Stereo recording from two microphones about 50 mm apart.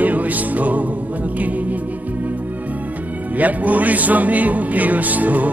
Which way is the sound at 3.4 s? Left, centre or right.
Right.